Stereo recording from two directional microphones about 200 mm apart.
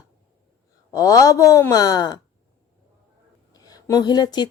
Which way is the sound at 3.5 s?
20° left (ahead or behind).